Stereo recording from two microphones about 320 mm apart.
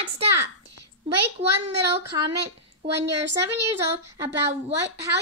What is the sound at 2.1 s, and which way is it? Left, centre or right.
Speech, centre.